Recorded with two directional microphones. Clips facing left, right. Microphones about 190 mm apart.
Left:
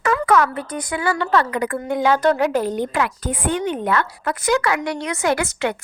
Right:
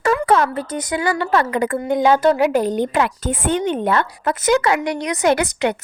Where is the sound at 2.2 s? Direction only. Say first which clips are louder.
Right 2 dB; 10° right (ahead or behind).